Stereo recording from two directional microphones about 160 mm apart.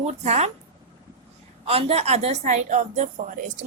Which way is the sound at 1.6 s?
40° right (ahead or behind).